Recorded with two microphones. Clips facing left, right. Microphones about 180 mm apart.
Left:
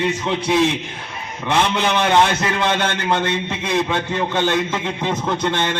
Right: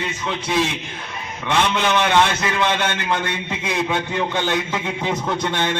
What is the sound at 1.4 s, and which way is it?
Speech, 15° left (ahead or behind).